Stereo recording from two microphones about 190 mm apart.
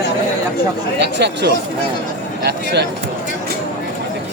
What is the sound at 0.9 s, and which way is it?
Speech, 60° right (ahead or behind).